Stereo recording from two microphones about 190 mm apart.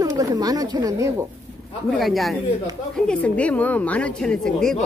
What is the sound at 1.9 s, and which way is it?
A woman's voice, centre (ahead or behind).